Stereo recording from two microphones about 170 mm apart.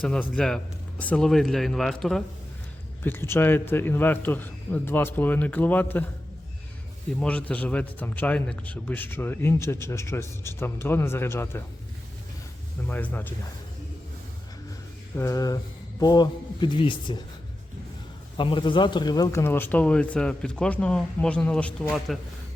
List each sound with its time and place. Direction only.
0.0 s a man's voice: 5° left (ahead or behind)
3.0 s a man's voice: 15° left (ahead or behind)
7.2 s a man's voice: 10° left (ahead or behind)
12.9 s a man's voice: 10° left (ahead or behind)
15.1 s a man's voice: 15° left (ahead or behind)
18.3 s a man's voice: 30° left (ahead or behind); by 22.2 s centre (ahead or behind)